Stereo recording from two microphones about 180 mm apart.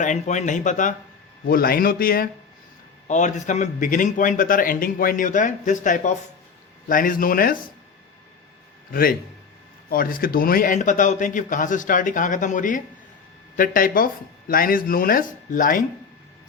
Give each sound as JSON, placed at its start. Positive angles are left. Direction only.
{"t": 0.0, "sound": "a man's voice", "side_deg": 45}
{"t": 1.5, "sound": "speech", "side_deg": 55}
{"t": 3.1, "sound": "a man's voice", "side_deg": 40}
{"t": 8.9, "sound": "a man's voice", "side_deg": 55}